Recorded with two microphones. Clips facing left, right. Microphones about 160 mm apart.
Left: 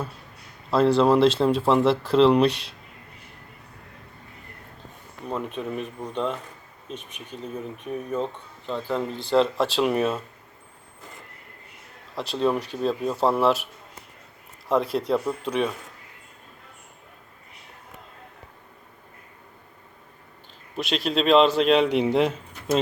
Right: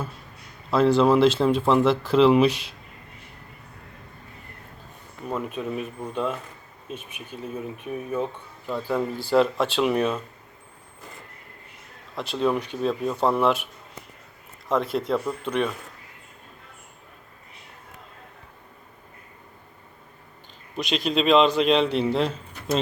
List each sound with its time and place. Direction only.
0.7 s speech: centre (ahead or behind)
5.3 s speech: 5° right (ahead or behind)
12.1 s speech: centre (ahead or behind)
14.7 s speech: centre (ahead or behind)
20.7 s speech: centre (ahead or behind)
21.8 s speech: 15° left (ahead or behind)